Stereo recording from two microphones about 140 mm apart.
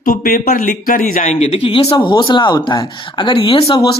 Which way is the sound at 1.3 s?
50° left (ahead or behind).